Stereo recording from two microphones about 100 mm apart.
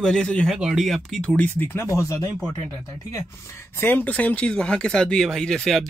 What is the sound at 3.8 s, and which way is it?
Speech, 20° left (ahead or behind).